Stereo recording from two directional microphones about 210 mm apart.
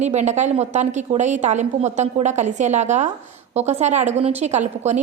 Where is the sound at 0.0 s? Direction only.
35° right (ahead or behind).